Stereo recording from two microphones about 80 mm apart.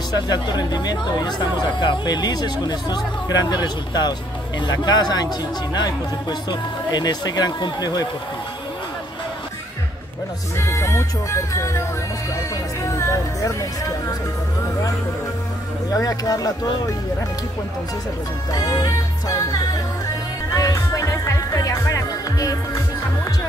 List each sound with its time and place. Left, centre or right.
0.1 s speech: left
10.6 s music: left
12.8 s music: left
15.9 s speech: left
18.5 s music: left